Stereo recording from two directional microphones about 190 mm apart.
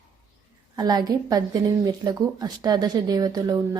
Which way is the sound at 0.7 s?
20° right (ahead or behind).